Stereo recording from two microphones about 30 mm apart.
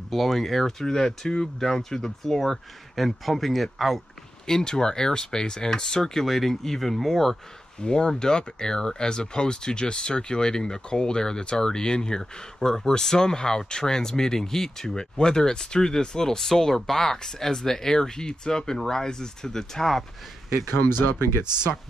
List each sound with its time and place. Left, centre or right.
0.1 s speech: centre
4.5 s speech: left
6.2 s speech: centre
7.8 s speech: left
15.0 s speech: left